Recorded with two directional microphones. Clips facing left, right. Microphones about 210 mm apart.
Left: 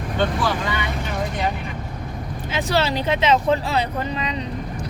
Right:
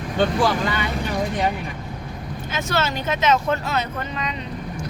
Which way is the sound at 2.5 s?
30° left (ahead or behind).